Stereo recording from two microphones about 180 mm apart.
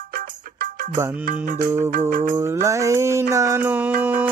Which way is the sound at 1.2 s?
50° right (ahead or behind).